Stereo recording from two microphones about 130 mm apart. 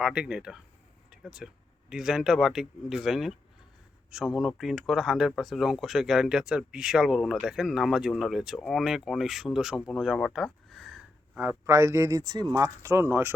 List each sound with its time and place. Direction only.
0.0 s speech: 5° right (ahead or behind)
1.1 s a sound: 5° right (ahead or behind)
1.9 s speech: 5° right (ahead or behind)
11.3 s speech: 15° right (ahead or behind)